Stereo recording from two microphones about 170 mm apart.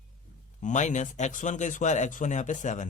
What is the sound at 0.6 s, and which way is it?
A man's voice, 45° left (ahead or behind).